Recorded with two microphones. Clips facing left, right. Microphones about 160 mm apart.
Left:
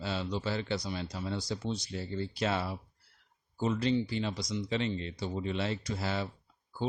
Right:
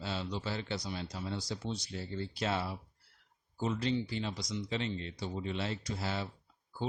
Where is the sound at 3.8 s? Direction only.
70° left (ahead or behind).